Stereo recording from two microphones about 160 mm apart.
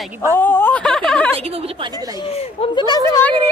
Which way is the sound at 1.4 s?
40° right (ahead or behind).